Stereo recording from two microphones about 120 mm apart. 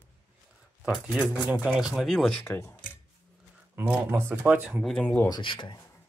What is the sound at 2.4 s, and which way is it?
Speech, 20° left (ahead or behind).